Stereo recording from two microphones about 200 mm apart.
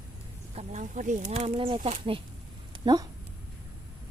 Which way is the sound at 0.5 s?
35° right (ahead or behind).